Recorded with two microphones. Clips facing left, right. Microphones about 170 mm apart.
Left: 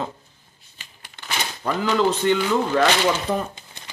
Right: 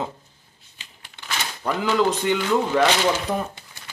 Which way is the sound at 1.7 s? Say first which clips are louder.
Even; 15° right (ahead or behind).